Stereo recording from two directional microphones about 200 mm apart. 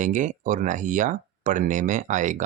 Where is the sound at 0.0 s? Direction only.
40° right (ahead or behind).